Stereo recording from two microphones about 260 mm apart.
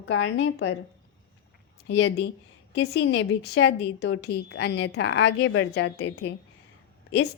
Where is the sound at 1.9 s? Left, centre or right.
Left.